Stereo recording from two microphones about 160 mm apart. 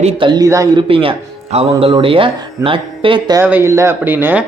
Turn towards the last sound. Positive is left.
turn(degrees=-10)  # may be behind; listen again after turning